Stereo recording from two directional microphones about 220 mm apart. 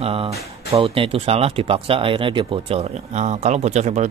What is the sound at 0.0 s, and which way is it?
Speech, 25° right (ahead or behind).